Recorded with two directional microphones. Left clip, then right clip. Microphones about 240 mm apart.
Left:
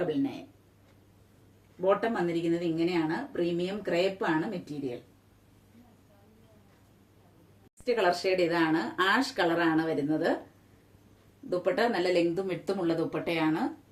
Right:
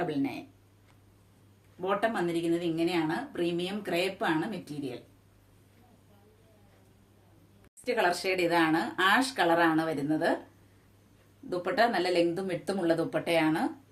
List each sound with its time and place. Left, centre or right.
1.8 s a woman's voice: centre
7.9 s speech: centre
11.4 s a woman's voice: centre